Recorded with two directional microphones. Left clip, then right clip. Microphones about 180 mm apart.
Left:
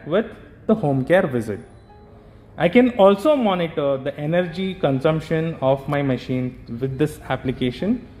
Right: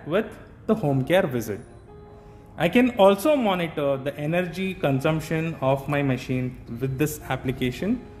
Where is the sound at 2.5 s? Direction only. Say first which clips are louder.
Left 5 dB; 20° left (ahead or behind).